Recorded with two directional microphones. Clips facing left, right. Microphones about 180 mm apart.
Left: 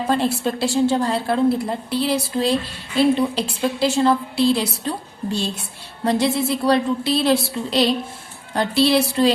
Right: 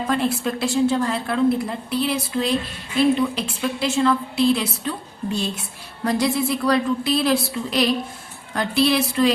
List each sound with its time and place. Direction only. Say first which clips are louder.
0.1 s a woman's voice: left 2 dB; 30° left (ahead or behind)